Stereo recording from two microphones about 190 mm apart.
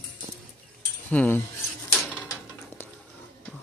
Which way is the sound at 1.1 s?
10° left (ahead or behind).